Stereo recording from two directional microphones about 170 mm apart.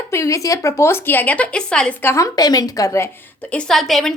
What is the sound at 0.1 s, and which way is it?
A woman's voice, 15° left (ahead or behind).